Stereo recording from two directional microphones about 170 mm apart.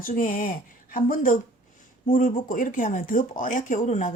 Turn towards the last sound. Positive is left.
turn(degrees=50)  # may be behind; listen again after turning